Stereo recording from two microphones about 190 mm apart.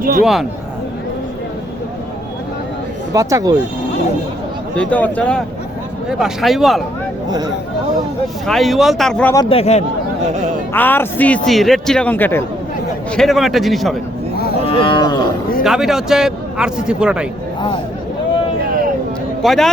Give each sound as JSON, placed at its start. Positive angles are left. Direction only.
{"t": 0.0, "sound": "speech", "side_deg": -45}
{"t": 3.1, "sound": "speech", "side_deg": -15}
{"t": 4.8, "sound": "speech", "side_deg": 10}
{"t": 8.4, "sound": "speech", "side_deg": 0}
{"t": 9.5, "sound": "speech", "side_deg": 30}
{"t": 10.8, "sound": "speech", "side_deg": 10}
{"t": 14.7, "sound": "cattle", "side_deg": 25}
{"t": 15.6, "sound": "speech", "side_deg": 0}
{"t": 19.4, "sound": "speech", "side_deg": 0}